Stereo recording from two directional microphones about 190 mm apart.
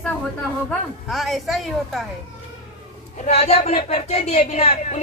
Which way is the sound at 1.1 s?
Centre (ahead or behind).